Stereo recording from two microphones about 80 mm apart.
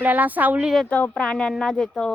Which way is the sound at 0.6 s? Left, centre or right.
Centre.